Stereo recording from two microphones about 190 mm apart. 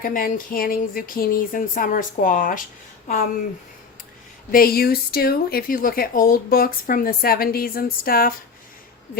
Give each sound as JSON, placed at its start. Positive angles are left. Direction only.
{"t": 0.0, "sound": "speech", "side_deg": 45}
{"t": 4.5, "sound": "speech", "side_deg": 50}